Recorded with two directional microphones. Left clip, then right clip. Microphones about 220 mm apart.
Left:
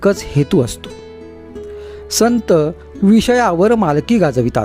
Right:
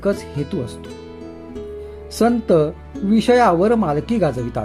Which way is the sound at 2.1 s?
50° left (ahead or behind).